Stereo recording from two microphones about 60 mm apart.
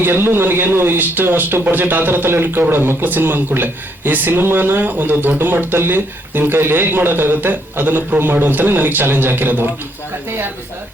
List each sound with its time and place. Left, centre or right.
0.0 s speech: right